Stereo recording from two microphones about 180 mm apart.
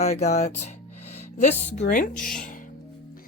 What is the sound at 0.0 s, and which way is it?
Speech, 40° left (ahead or behind).